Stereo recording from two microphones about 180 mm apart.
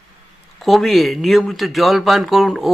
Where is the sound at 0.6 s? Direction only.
Centre (ahead or behind).